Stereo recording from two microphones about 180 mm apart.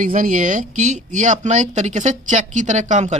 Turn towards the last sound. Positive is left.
turn(degrees=-40)  # may be behind; listen again after turning